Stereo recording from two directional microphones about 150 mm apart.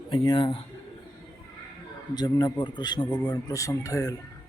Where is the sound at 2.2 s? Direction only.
25° left (ahead or behind).